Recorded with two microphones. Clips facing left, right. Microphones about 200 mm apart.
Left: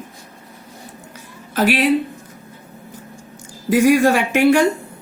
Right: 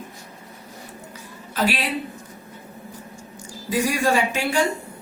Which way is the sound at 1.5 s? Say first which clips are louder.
Left 7 dB; 60° left (ahead or behind).